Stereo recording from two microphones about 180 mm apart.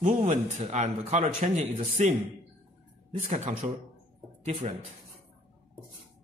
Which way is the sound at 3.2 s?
45° right (ahead or behind).